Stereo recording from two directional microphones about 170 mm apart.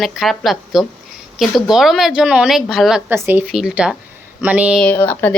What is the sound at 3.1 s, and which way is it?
Speech, 10° right (ahead or behind).